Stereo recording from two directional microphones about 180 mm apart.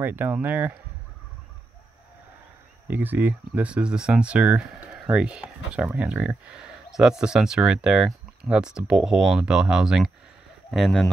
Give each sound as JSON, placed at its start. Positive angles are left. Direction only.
{"t": 0.0, "sound": "speech", "side_deg": -10}
{"t": 2.9, "sound": "speech", "side_deg": -10}